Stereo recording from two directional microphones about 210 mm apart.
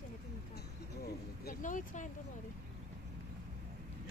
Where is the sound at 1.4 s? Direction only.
40° left (ahead or behind).